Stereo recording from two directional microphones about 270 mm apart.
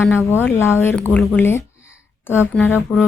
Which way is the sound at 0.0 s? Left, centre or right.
Centre.